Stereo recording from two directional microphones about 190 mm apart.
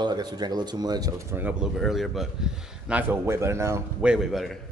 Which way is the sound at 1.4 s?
5° right (ahead or behind).